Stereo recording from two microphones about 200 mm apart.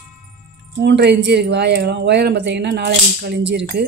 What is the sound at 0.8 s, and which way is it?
Speech, 60° right (ahead or behind).